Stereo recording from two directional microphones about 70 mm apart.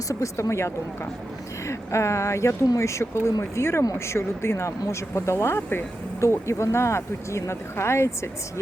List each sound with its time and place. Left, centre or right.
0.1 s speech: left